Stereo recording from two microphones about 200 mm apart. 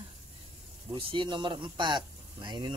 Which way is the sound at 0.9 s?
25° right (ahead or behind).